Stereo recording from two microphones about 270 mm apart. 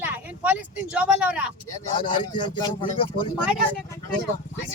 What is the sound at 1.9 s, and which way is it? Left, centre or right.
A man's voice, centre.